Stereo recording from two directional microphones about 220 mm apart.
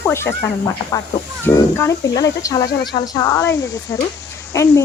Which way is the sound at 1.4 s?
15° left (ahead or behind).